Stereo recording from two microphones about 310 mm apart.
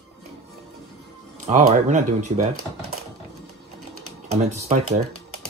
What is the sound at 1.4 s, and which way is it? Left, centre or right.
Speech, right.